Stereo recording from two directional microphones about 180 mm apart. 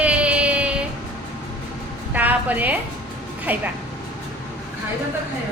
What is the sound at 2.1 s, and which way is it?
A woman's voice, 10° right (ahead or behind).